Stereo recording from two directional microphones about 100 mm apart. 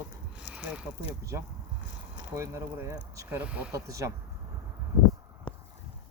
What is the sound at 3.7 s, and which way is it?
Speech, 30° right (ahead or behind).